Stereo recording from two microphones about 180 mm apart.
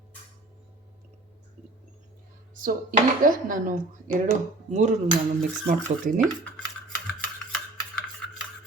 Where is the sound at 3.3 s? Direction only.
50° right (ahead or behind).